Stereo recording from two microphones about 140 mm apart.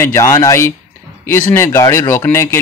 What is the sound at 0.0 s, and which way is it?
Speech, 20° left (ahead or behind).